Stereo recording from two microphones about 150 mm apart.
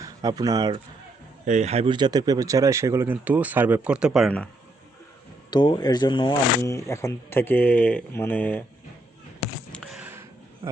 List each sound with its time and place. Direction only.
0.0 s speech: 25° right (ahead or behind)
1.5 s speech: 50° right (ahead or behind)
1.9 s speech: 30° right (ahead or behind); by 4.3 s 5° right (ahead or behind)
5.5 s speech: 30° left (ahead or behind)
6.6 s speech: 20° left (ahead or behind)
9.7 s a sound: centre (ahead or behind)